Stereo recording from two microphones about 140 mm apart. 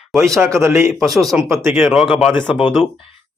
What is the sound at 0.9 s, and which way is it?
Speech, centre (ahead or behind).